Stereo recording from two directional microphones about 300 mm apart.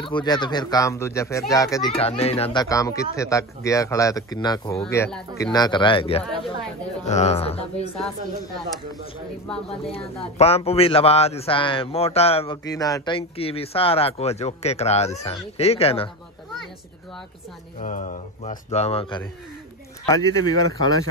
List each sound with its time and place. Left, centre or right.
0.0 s a child's voice: centre
10.2 s a man's voice: centre
17.7 s a man's voice: left